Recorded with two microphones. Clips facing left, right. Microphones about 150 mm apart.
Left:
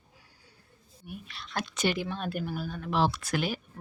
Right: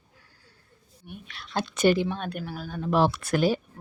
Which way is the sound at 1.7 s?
45° right (ahead or behind).